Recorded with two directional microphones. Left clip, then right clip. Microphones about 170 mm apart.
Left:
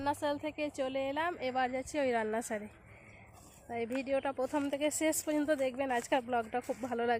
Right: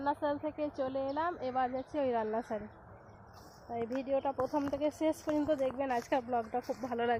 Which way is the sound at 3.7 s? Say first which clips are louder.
Even; 30° left (ahead or behind).